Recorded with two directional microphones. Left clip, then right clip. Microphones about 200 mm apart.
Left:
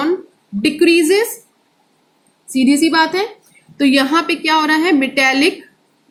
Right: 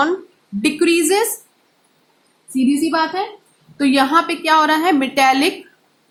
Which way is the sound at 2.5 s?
20° right (ahead or behind).